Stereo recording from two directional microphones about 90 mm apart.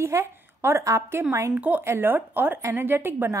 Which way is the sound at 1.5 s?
20° right (ahead or behind).